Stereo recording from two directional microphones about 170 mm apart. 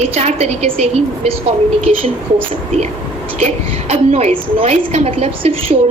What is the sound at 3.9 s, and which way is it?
A woman's voice, 40° right (ahead or behind).